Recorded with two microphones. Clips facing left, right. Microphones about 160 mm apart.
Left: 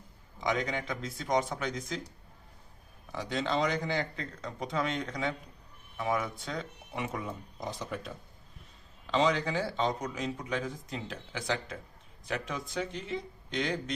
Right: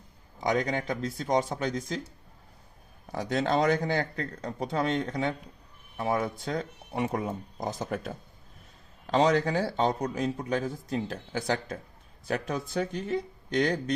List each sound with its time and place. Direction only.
0.3 s speech: 40° right (ahead or behind)
3.1 s speech: 45° right (ahead or behind)